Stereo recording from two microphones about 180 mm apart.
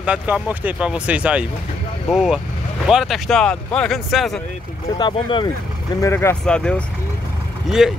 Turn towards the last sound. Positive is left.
turn(degrees=0)  # may be behind; listen again after turning